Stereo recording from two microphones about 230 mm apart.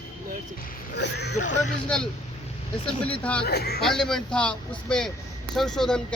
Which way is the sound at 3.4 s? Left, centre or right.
Left.